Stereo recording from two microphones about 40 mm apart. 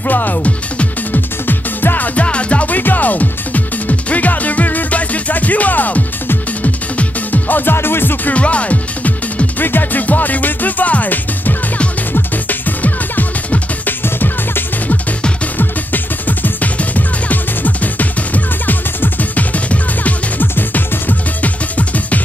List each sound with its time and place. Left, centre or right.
0.0 s speech: left
1.1 s music: left
2.1 s music: left
2.7 s music: left
7.7 s music: left
8.3 s music: left
9.6 s music: left
14.0 s music: left
15.5 s music: left